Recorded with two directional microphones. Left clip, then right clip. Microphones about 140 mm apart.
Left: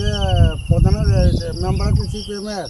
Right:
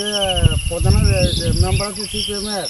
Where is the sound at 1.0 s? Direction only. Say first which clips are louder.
Right 3 dB; 15° left (ahead or behind).